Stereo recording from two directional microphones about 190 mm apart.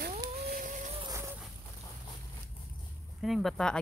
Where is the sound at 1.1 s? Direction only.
15° right (ahead or behind).